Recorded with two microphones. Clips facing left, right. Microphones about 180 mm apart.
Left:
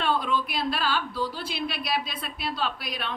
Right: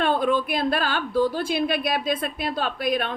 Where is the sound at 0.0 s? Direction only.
50° right (ahead or behind).